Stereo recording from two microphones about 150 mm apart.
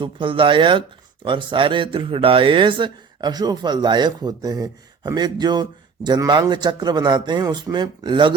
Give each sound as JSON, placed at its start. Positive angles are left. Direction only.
{"t": 0.0, "sound": "speech", "side_deg": -35}